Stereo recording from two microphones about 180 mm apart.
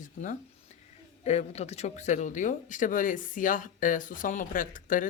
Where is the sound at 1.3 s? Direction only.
35° left (ahead or behind).